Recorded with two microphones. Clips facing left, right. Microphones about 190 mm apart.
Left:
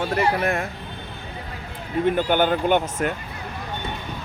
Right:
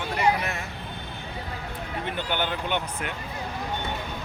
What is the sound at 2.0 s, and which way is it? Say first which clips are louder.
Speech: left 10 dB; 50° left (ahead or behind).